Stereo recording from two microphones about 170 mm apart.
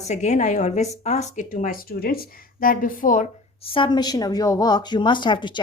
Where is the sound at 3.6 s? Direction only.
30° left (ahead or behind).